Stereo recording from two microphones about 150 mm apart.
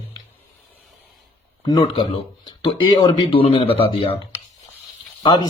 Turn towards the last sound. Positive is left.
turn(degrees=30)  # may be behind; listen again after turning